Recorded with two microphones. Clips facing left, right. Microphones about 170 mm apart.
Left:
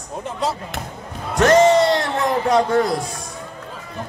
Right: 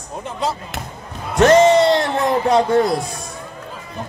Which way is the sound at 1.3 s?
25° right (ahead or behind).